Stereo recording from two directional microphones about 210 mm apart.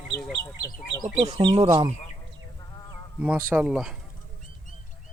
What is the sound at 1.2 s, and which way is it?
Speech, 20° right (ahead or behind).